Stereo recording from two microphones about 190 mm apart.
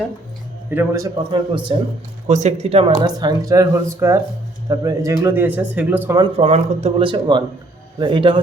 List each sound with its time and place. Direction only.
0.7 s a man's voice: 15° right (ahead or behind)
2.2 s a man's voice: 35° right (ahead or behind); by 6.1 s 10° right (ahead or behind)
6.1 s speech: 30° right (ahead or behind)